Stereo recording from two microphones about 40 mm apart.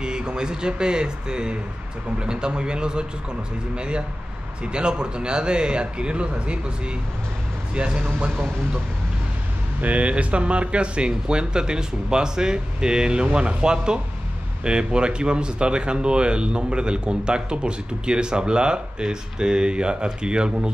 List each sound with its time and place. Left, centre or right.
0.0 s speech: right
7.7 s speech: right
9.8 s speech: right